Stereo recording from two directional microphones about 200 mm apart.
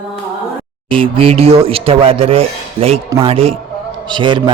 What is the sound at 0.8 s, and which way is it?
Speech, 25° right (ahead or behind).